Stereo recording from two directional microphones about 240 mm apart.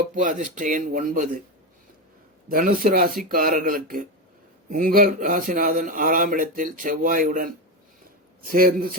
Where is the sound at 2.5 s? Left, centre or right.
Right.